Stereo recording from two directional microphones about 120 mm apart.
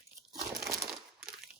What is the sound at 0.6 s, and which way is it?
Crumpling, 25° right (ahead or behind).